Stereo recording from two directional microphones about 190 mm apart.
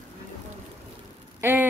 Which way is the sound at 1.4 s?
10° right (ahead or behind).